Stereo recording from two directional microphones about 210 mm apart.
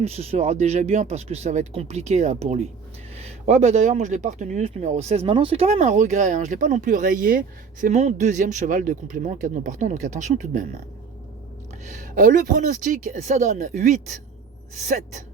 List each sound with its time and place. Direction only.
0.0 s speech: 30° right (ahead or behind)
11.9 s speech: 35° right (ahead or behind)